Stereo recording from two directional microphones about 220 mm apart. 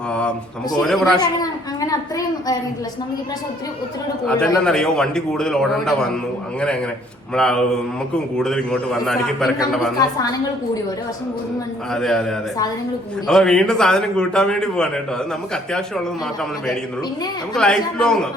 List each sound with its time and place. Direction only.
0.1 s speech: 5° left (ahead or behind)
1.2 s a sound: 15° left (ahead or behind)
4.3 s a man's voice: 5° left (ahead or behind)
7.3 s a man's voice: 5° left (ahead or behind)
11.9 s a man's voice: 5° left (ahead or behind)
17.5 s a man's voice: 5° left (ahead or behind)